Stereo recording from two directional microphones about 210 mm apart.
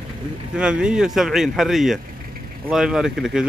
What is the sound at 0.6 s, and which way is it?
Speech, 5° right (ahead or behind).